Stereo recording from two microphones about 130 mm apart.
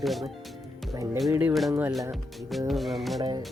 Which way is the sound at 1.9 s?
Centre (ahead or behind).